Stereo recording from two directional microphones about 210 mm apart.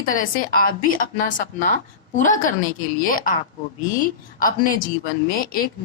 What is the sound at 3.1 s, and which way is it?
Speech, 40° left (ahead or behind).